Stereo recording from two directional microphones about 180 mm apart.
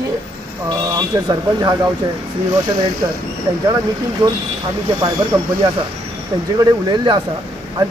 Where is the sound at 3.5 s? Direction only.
20° right (ahead or behind).